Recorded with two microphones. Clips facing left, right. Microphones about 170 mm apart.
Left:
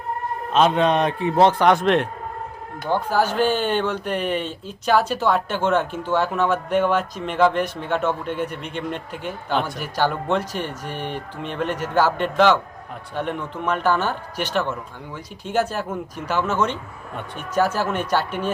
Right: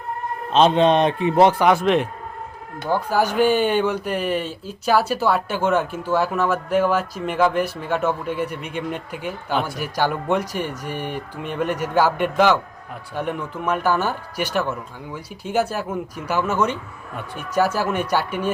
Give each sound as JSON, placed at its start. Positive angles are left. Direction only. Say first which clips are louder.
{"t": 0.5, "sound": "speech", "louder": "right 2 dB", "side_deg": -25}